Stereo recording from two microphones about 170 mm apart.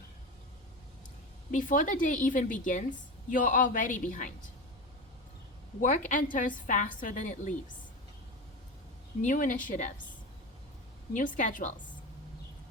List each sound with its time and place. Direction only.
1.5 s a woman's voice: 50° left (ahead or behind)
5.8 s a woman's voice: 50° left (ahead or behind)
9.2 s a woman's voice: 50° left (ahead or behind)
11.1 s a woman's voice: 45° left (ahead or behind)